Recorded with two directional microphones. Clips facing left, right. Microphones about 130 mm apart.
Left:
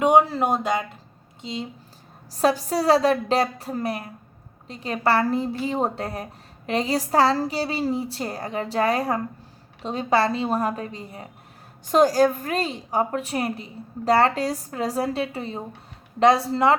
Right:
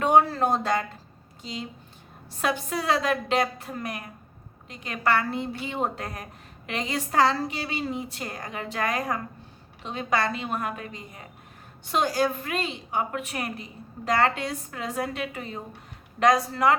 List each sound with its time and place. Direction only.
0.0 s a sound: 15° left (ahead or behind)
1.4 s speech: 25° left (ahead or behind)
2.3 s a woman's voice: 35° left (ahead or behind)